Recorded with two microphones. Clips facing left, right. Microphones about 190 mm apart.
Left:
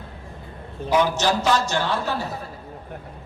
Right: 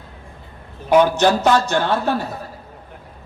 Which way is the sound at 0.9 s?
55° right (ahead or behind).